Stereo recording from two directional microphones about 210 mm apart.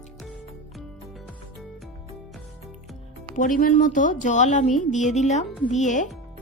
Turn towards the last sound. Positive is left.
turn(degrees=35)  # may be behind; listen again after turning